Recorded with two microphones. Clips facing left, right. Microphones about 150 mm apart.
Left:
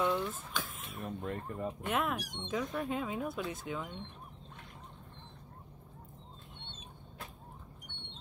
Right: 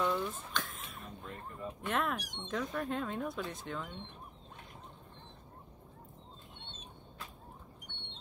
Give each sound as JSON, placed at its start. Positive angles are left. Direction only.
{"t": 0.0, "sound": "a sound", "side_deg": 0}
{"t": 1.0, "sound": "speech", "side_deg": 55}
{"t": 1.9, "sound": "speech", "side_deg": 5}